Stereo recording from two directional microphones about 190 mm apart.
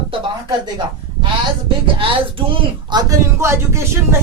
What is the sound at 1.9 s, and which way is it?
Speech, 25° right (ahead or behind).